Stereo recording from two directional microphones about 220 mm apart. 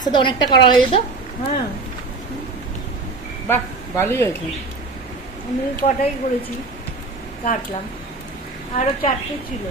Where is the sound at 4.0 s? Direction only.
10° left (ahead or behind).